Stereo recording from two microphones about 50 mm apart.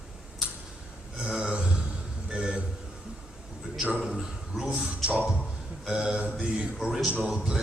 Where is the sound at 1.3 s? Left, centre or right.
Centre.